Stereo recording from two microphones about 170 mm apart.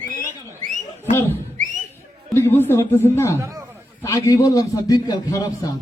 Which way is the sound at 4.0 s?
15° left (ahead or behind).